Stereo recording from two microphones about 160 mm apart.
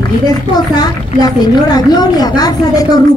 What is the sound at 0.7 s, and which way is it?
Speech, 25° left (ahead or behind).